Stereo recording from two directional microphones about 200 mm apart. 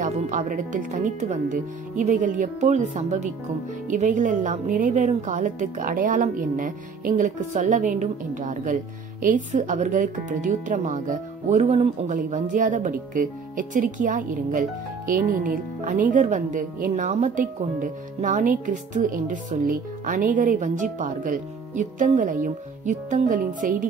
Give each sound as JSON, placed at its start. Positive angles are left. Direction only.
{"t": 0.0, "sound": "speech", "side_deg": -35}